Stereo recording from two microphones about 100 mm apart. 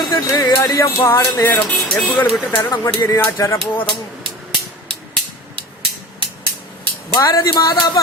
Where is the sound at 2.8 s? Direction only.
30° left (ahead or behind).